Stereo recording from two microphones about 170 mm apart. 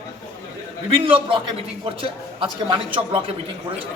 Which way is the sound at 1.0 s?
30° right (ahead or behind).